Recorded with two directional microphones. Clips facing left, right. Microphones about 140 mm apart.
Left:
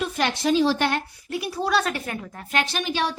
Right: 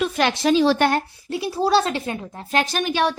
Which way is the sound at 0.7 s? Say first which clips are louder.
Right 5 dB; 45° right (ahead or behind).